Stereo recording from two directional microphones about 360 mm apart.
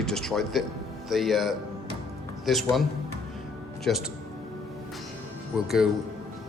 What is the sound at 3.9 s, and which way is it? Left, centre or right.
Speech, centre.